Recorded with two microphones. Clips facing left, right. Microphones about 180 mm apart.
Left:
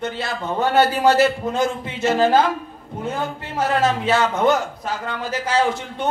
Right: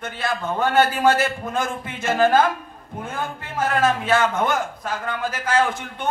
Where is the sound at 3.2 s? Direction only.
50° right (ahead or behind).